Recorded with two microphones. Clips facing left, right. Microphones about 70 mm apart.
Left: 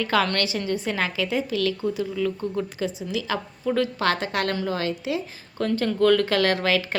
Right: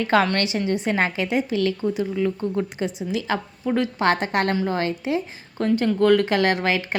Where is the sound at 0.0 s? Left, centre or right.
Right.